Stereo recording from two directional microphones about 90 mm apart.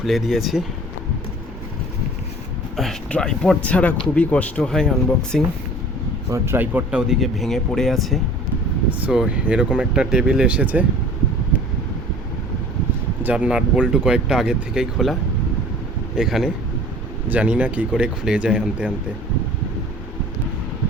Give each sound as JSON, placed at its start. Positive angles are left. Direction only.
{"t": 0.0, "sound": "speech", "side_deg": 0}
{"t": 3.1, "sound": "speech", "side_deg": 10}
{"t": 6.3, "sound": "speech", "side_deg": -25}
{"t": 7.1, "sound": "speech", "side_deg": 0}
{"t": 8.9, "sound": "speech", "side_deg": -15}
{"t": 13.2, "sound": "speech", "side_deg": -10}
{"t": 16.1, "sound": "speech", "side_deg": -5}